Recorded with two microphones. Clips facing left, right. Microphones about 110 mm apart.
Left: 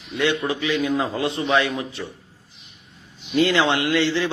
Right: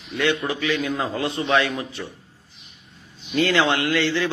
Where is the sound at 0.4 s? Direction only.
20° left (ahead or behind).